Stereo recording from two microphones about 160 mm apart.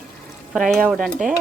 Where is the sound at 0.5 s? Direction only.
Centre (ahead or behind).